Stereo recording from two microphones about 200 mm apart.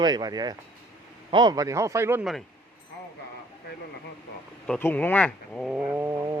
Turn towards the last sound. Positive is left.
turn(degrees=-15)  # may be behind; listen again after turning